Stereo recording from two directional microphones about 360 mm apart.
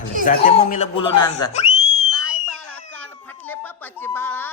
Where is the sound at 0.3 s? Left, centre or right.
Centre.